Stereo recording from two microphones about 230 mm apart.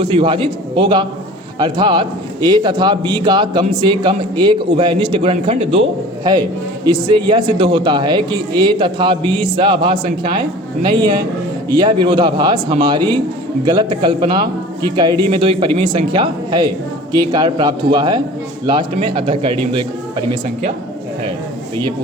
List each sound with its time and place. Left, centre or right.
0.0 s a man's voice: right